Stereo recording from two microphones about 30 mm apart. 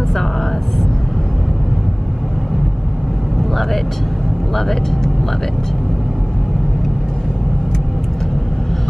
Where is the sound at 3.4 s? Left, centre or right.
Centre.